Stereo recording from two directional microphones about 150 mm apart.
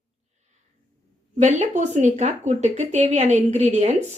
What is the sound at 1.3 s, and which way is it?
Speech, 50° right (ahead or behind).